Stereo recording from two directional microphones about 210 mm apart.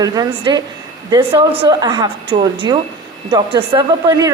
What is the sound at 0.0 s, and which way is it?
A woman's voice, 20° right (ahead or behind).